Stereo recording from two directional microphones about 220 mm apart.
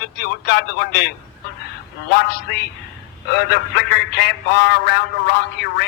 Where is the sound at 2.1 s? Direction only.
45° left (ahead or behind).